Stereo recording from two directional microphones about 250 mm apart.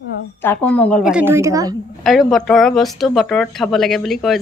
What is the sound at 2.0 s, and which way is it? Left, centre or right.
Speech, centre.